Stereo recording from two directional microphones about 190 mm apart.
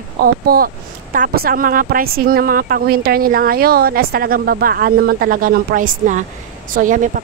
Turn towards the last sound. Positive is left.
turn(degrees=-40)  # may be behind; listen again after turning